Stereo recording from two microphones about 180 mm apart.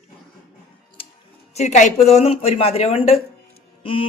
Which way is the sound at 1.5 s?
40° left (ahead or behind).